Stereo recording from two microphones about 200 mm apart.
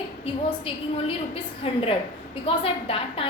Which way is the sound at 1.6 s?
30° left (ahead or behind).